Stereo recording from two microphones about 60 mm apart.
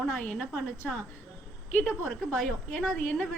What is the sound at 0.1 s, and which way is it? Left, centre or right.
Speech, centre.